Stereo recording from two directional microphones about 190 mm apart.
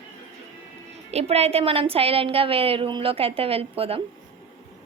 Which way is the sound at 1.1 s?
35° right (ahead or behind).